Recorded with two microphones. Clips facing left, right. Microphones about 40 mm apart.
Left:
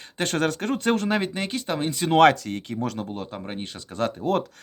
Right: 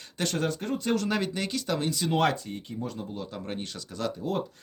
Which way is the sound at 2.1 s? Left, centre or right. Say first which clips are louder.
Left 11 dB; left.